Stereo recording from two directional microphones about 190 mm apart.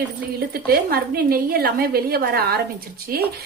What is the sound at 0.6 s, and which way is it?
A woman's voice, 55° right (ahead or behind).